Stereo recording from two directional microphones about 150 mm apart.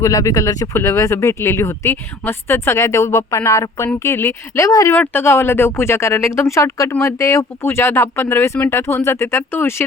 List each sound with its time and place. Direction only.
0.0 s speech: 20° left (ahead or behind)